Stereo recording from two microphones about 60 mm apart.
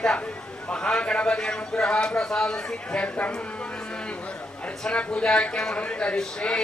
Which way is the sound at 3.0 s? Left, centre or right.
Left.